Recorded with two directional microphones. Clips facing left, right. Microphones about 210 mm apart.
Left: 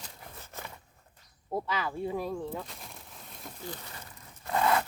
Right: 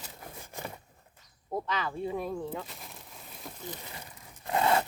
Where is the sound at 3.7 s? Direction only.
15° right (ahead or behind).